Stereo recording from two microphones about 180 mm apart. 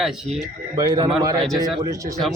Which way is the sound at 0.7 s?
20° right (ahead or behind).